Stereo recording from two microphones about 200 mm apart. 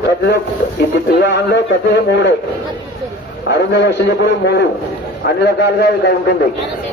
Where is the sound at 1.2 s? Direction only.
55° left (ahead or behind).